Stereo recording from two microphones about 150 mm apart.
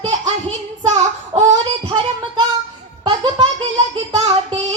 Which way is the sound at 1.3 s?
35° right (ahead or behind).